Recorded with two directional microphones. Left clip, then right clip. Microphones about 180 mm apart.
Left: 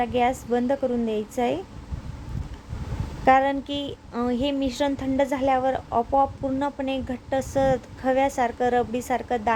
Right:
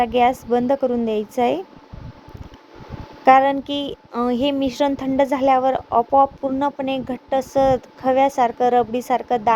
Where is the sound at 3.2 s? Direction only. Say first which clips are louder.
Right 6 dB; 25° right (ahead or behind).